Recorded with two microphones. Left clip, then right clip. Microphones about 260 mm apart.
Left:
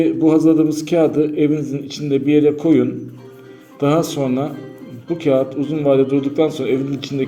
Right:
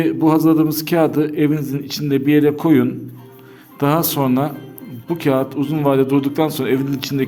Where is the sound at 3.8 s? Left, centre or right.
Right.